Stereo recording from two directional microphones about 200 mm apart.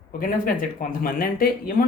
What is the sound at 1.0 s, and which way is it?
Speech, 45° left (ahead or behind).